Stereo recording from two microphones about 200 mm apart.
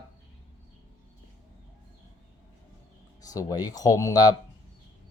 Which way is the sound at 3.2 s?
15° left (ahead or behind).